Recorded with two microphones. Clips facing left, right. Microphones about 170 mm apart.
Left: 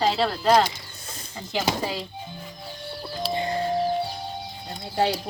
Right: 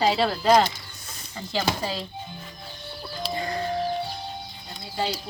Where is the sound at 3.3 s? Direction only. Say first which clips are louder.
Left 3 dB; 25° left (ahead or behind).